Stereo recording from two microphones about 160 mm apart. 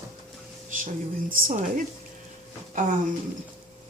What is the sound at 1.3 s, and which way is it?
Speech, 55° right (ahead or behind).